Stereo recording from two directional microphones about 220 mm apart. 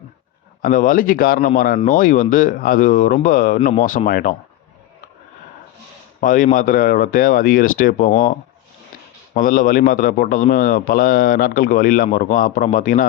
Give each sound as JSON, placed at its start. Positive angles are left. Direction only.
{"t": 0.6, "sound": "a man's voice", "side_deg": 40}
{"t": 6.1, "sound": "a man's voice", "side_deg": 35}